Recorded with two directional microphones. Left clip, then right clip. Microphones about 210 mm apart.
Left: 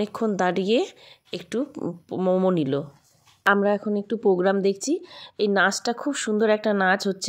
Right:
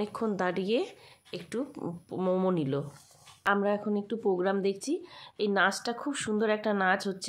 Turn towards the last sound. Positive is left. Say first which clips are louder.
# left 6 dB
turn(degrees=35)  # may be behind; listen again after turning